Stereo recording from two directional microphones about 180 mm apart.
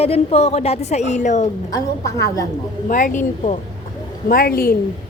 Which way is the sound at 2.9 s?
45° left (ahead or behind).